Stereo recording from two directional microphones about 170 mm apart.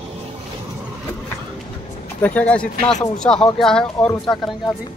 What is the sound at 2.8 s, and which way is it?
Speech, 45° left (ahead or behind).